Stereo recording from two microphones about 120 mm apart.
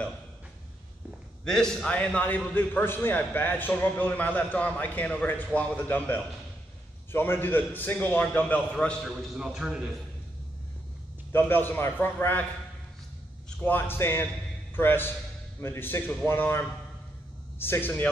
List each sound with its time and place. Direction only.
1.4 s a man's voice: 5° left (ahead or behind)
9.0 s a man's voice: centre (ahead or behind)
11.3 s a man's voice: 20° left (ahead or behind)
13.6 s a man's voice: 15° left (ahead or behind)